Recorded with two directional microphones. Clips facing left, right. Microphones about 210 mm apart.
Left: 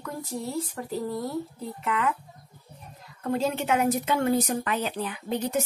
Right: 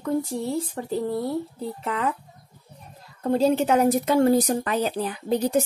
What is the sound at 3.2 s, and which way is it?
Speech, 35° right (ahead or behind).